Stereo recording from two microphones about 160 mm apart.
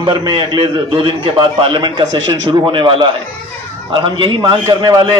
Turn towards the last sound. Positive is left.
turn(degrees=-25)  # may be behind; listen again after turning